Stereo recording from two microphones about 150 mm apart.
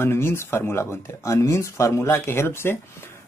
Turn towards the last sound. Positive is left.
turn(degrees=15)  # may be behind; listen again after turning